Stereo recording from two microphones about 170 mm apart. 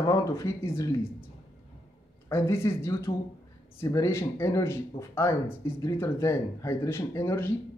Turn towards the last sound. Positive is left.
turn(degrees=15)  # may be behind; listen again after turning